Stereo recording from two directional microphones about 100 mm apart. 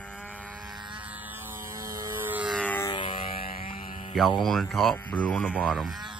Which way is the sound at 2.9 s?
55° left (ahead or behind).